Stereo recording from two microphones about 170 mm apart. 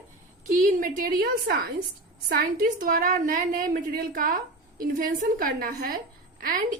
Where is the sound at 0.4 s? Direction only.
50° right (ahead or behind).